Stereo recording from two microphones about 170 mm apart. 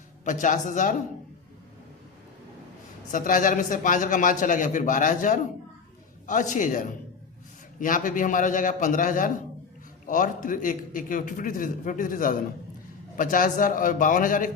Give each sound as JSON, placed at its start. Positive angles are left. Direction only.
{"t": 0.3, "sound": "a man's voice", "side_deg": 50}
{"t": 3.1, "sound": "a man's voice", "side_deg": 50}